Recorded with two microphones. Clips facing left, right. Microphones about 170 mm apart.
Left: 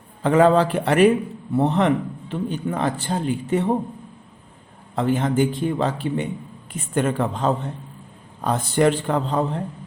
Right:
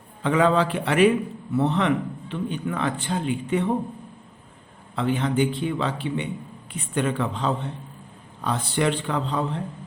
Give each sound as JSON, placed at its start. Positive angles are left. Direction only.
{"t": 0.2, "sound": "speech", "side_deg": 45}
{"t": 4.9, "sound": "speech", "side_deg": 45}